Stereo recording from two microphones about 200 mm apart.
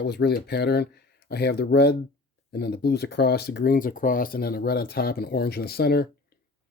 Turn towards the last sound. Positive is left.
turn(degrees=50)  # may be behind; listen again after turning